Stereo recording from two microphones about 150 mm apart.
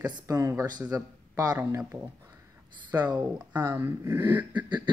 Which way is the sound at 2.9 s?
20° right (ahead or behind).